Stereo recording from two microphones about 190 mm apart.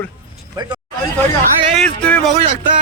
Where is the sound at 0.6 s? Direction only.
20° right (ahead or behind).